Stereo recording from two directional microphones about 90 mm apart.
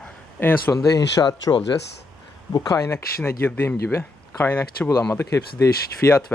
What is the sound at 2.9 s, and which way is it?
Speech, 25° left (ahead or behind).